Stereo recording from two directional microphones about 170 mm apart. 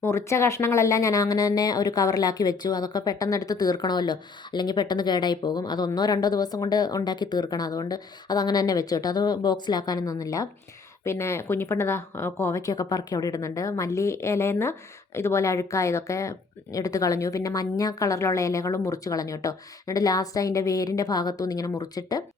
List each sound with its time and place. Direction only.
0.0 s speech: 15° left (ahead or behind)